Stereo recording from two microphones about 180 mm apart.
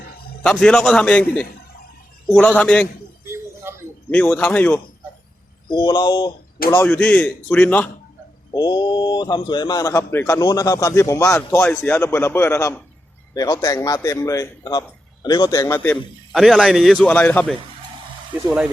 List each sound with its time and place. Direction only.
0.4 s a man's voice: 5° left (ahead or behind)
3.2 s a sound: 15° right (ahead or behind)
4.1 s a man's voice: 5° left (ahead or behind)
5.6 s a man's voice: 25° left (ahead or behind)
6.7 s a man's voice: 10° left (ahead or behind)
8.5 s a man's voice: 25° left (ahead or behind)
16.3 s a man's voice: centre (ahead or behind)
18.4 s speech: 5° right (ahead or behind)